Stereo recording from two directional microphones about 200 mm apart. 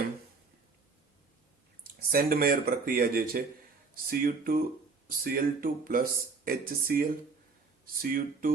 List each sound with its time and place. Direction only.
1.8 s speech: 45° right (ahead or behind)
8.0 s speech: 45° right (ahead or behind)